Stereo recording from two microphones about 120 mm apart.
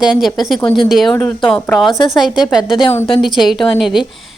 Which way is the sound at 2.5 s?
5° right (ahead or behind).